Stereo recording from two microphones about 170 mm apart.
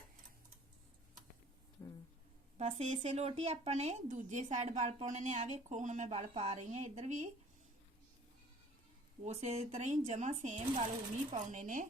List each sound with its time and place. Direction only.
1.8 s a sound: 15° left (ahead or behind)
2.6 s speech: 40° right (ahead or behind)
9.2 s speech: 40° right (ahead or behind)